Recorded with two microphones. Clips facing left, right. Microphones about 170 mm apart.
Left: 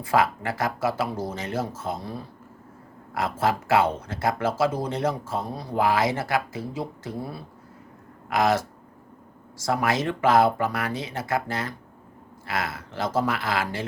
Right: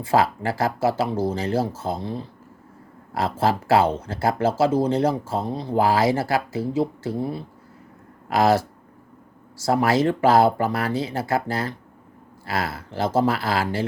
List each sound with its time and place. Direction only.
0.0 s speech: 30° right (ahead or behind)